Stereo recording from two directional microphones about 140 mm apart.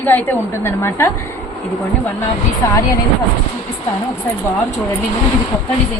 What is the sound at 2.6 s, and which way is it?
Speech, 20° left (ahead or behind).